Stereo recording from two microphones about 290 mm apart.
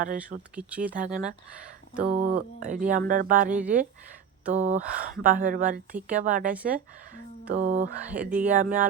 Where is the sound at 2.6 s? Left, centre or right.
Right.